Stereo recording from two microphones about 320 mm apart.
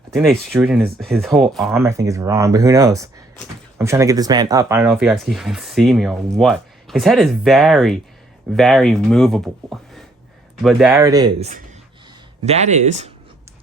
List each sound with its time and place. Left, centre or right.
0.1 s speech: centre; by 13.1 s right